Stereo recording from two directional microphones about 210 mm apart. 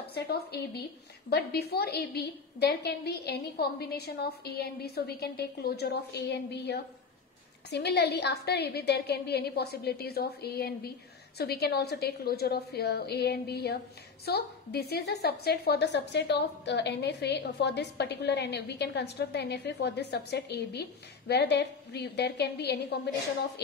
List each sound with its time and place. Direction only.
0.1 s a woman's voice: 50° left (ahead or behind)